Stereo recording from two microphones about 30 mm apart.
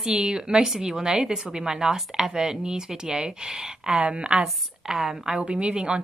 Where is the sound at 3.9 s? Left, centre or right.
Right.